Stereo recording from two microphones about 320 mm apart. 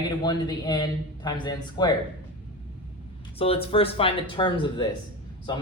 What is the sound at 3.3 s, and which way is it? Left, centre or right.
Speech, centre.